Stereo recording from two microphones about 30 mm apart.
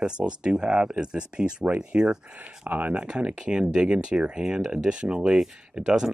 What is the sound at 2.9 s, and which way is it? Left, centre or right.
Speech, right.